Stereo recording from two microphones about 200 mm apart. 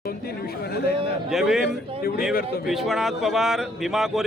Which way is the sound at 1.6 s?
50° left (ahead or behind).